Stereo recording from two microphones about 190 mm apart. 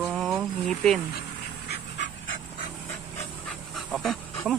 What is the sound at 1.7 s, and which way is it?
Dog, 70° left (ahead or behind).